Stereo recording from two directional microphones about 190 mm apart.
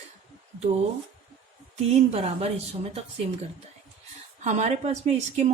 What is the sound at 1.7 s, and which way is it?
A woman's voice, 35° right (ahead or behind).